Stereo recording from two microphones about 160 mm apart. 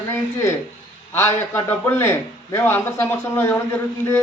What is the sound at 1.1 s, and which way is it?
A man's voice, 15° left (ahead or behind).